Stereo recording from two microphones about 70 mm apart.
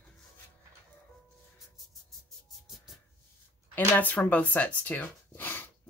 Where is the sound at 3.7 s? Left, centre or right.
Left.